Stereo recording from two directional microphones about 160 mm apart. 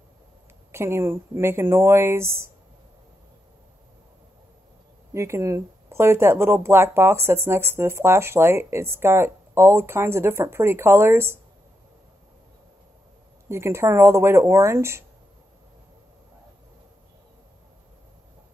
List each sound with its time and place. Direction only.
0.7 s speech: 15° right (ahead or behind)
5.1 s speech: 15° right (ahead or behind)
13.5 s speech: 15° right (ahead or behind)